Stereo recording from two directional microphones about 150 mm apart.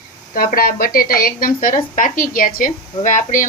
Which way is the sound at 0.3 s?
75° left (ahead or behind).